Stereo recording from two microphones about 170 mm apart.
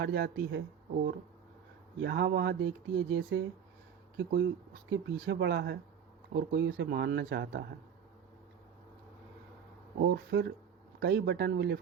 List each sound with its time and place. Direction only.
0.0 s speech: 80° right
2.0 s speech: 75° right (ahead or behind)
6.3 s speech: 75° right (ahead or behind)
10.0 s speech: 70° right (ahead or behind)